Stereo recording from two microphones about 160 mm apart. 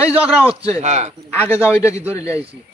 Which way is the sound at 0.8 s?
45° right (ahead or behind).